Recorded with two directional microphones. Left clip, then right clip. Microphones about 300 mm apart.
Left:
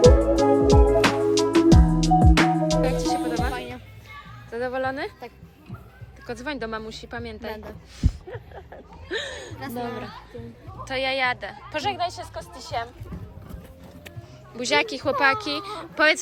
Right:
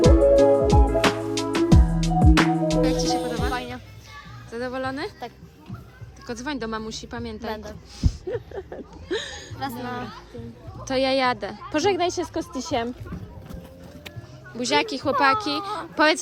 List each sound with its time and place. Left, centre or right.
0.0 s music: centre
4.5 s a sound: centre
6.2 s speech: centre
8.0 s a sound: centre
9.6 s speech: centre
10.8 s a woman's voice: centre
14.5 s speech: centre